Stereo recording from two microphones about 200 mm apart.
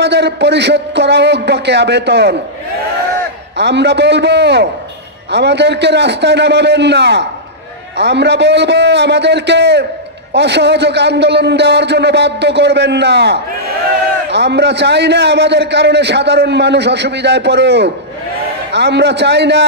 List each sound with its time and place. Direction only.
0.0 s a man's voice: 60° right (ahead or behind)
3.5 s a man's voice: 60° right (ahead or behind)